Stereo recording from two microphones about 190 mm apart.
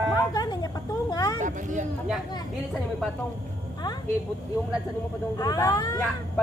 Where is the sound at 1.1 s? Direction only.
20° left (ahead or behind).